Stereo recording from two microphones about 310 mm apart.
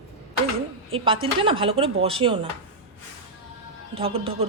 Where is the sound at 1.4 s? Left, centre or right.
Centre.